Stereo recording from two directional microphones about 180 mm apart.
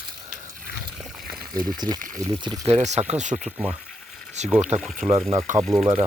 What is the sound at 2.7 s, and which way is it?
Speech, 40° right (ahead or behind).